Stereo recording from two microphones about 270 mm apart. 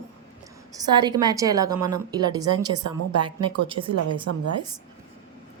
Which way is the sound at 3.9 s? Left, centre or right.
Right.